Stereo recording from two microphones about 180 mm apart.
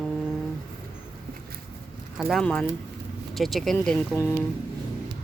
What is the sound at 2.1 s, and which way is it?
Speech, centre (ahead or behind).